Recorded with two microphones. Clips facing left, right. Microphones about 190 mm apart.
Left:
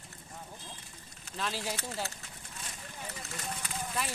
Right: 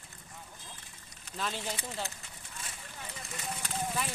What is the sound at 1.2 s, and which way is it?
Speech, centre (ahead or behind).